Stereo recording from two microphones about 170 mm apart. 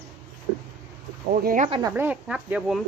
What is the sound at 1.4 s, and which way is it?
Speech, 50° right (ahead or behind).